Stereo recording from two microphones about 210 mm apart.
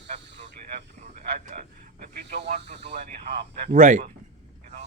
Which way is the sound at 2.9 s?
50° right (ahead or behind).